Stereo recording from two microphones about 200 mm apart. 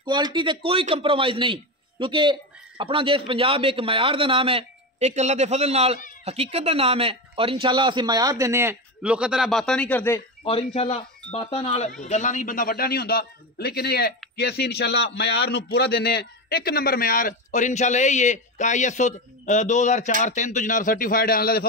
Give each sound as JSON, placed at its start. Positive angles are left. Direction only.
{"t": 0.0, "sound": "speech", "side_deg": -20}
{"t": 10.4, "sound": "a man's voice", "side_deg": 30}